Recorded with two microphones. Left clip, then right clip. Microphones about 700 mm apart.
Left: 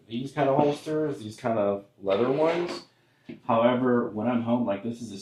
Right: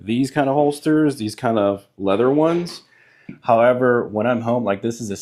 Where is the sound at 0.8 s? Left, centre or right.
Right.